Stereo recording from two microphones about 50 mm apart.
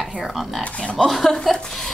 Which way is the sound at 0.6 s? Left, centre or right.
Left.